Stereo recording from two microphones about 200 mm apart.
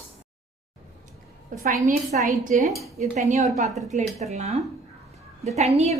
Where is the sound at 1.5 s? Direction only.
40° right (ahead or behind).